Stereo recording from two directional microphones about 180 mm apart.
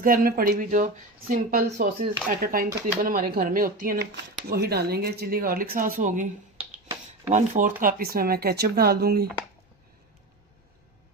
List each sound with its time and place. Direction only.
0.0 s speech: 55° right (ahead or behind)
7.3 s speech: 45° right (ahead or behind); by 9.2 s 60° right (ahead or behind)